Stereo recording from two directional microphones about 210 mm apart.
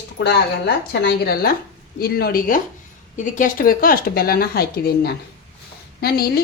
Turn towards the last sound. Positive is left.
turn(degrees=45)  # may be behind; listen again after turning